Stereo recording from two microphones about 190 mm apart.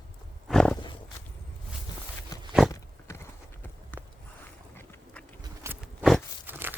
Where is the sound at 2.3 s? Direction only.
20° left (ahead or behind).